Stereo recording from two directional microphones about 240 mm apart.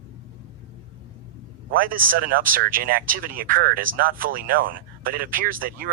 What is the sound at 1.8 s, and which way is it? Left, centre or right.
Speech, right.